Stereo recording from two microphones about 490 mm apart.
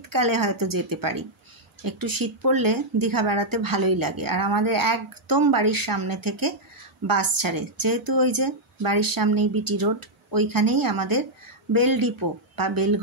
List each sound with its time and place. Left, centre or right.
0.1 s speech: right